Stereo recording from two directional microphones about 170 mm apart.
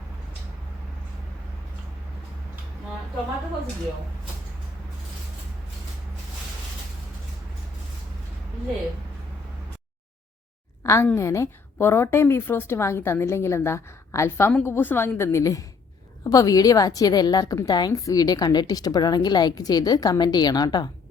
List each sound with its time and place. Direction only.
10.8 s a woman's voice: 15° left (ahead or behind)